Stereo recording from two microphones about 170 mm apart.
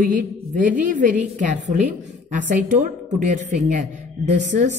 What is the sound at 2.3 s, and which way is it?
A woman's voice, 50° right (ahead or behind).